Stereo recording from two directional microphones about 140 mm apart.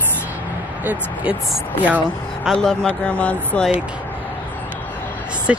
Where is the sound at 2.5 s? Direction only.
5° left (ahead or behind).